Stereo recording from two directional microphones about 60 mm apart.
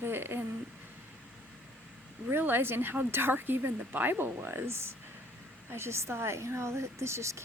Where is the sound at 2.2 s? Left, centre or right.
Right.